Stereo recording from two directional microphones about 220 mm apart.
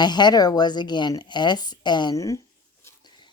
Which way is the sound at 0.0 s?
20° left (ahead or behind).